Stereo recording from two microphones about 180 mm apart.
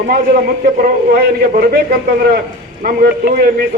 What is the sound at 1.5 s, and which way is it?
Speech, 55° right (ahead or behind).